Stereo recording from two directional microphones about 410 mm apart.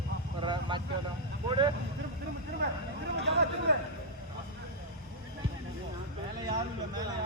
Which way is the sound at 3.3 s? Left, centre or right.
Right.